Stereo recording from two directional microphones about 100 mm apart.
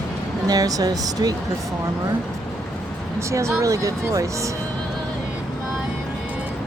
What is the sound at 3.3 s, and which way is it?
Speech, 30° right (ahead or behind).